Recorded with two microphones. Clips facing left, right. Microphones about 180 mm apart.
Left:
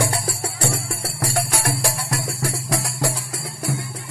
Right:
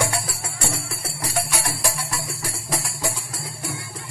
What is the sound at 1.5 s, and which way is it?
Music, 60° left (ahead or behind).